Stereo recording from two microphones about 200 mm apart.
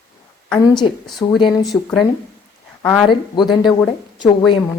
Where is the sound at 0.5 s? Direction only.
20° left (ahead or behind).